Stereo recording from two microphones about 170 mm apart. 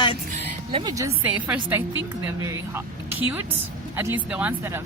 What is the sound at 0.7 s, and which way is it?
Speech, 30° right (ahead or behind).